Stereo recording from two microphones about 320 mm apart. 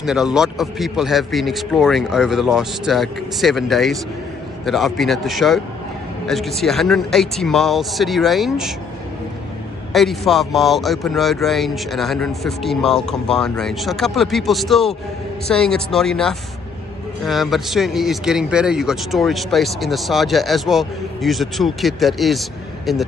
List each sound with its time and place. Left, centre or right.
0.0 s speech: centre
9.9 s speech: centre